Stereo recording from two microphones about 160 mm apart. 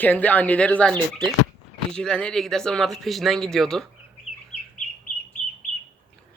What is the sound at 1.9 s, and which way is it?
Speech, 5° left (ahead or behind).